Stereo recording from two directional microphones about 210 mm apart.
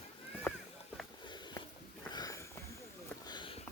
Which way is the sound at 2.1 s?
15° left (ahead or behind).